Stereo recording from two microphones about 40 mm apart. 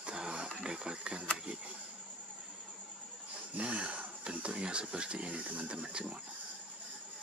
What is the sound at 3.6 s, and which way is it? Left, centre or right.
Speech, right.